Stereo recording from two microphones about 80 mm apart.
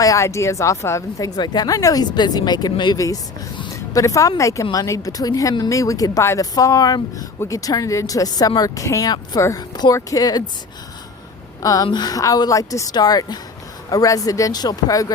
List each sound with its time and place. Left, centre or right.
0.0 s speech: left
1.4 s speech: left
3.9 s speech: left
9.0 s speech: left
9.9 s speech: left
11.6 s speech: left
11.9 s speech: left